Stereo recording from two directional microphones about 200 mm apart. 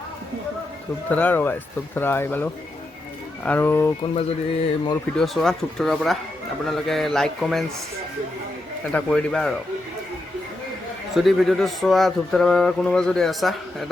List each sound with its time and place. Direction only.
1.1 s speech: 10° left (ahead or behind)
4.0 s bird: 30° left (ahead or behind)
5.1 s a man's voice: centre (ahead or behind)
8.9 s a man's voice: 5° left (ahead or behind)
11.1 s a man's voice: centre (ahead or behind)